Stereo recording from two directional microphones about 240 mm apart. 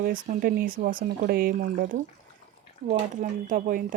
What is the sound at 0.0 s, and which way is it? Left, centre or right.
Speech, right.